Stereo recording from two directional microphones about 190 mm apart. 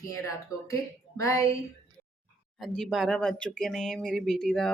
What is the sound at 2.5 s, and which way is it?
Speech, centre (ahead or behind).